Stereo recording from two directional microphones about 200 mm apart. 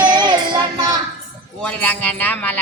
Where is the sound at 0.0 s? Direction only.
20° right (ahead or behind).